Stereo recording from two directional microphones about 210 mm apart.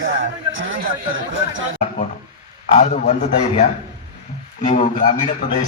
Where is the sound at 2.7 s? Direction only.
35° left (ahead or behind).